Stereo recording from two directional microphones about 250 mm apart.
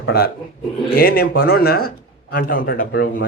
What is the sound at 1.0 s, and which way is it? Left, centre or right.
Speech, left.